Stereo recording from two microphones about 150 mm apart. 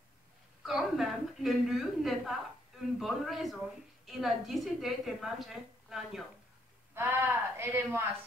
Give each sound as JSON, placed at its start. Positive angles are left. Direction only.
{"t": 0.7, "sound": "a woman's voice", "side_deg": 0}
{"t": 6.9, "sound": "speech", "side_deg": -15}